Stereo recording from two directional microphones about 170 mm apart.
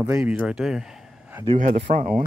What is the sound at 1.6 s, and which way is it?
Speech, 55° right (ahead or behind).